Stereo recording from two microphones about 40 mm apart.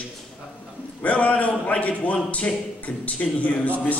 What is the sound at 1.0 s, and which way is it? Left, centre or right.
Speech, left.